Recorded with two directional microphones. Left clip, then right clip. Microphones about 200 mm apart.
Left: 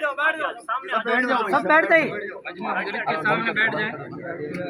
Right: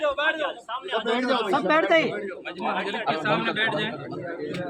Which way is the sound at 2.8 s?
30° right (ahead or behind).